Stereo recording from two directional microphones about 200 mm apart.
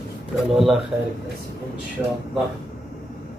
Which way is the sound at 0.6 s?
Centre (ahead or behind).